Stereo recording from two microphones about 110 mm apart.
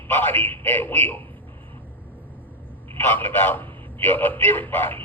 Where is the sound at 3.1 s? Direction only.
20° left (ahead or behind).